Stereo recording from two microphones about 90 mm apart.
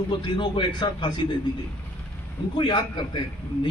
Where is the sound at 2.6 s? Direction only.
60° left (ahead or behind).